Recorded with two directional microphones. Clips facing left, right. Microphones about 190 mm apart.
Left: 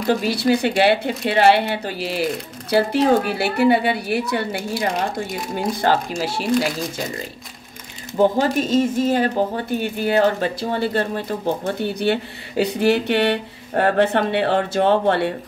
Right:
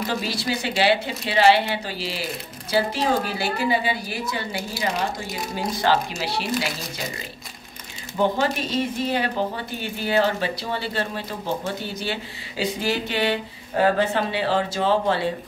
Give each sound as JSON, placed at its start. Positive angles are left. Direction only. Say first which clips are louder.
{"t": 0.0, "sound": "speech", "louder": "left 7 dB", "side_deg": 55}
{"t": 4.7, "sound": "speech", "louder": "left 3 dB", "side_deg": 50}
{"t": 8.2, "sound": "speech", "louder": "left 5 dB", "side_deg": 45}